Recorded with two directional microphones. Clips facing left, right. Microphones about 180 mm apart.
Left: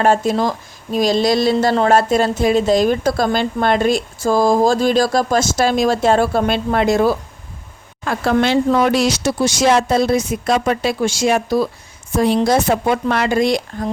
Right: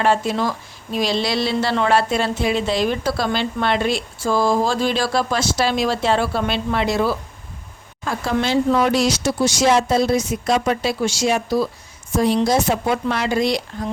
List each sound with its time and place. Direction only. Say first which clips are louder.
0.0 s a woman's voice: left 4 dB; 45° left (ahead or behind)
8.0 s a woman's voice: left 5 dB; 65° left (ahead or behind)